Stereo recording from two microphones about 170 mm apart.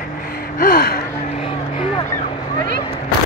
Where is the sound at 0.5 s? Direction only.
60° left (ahead or behind).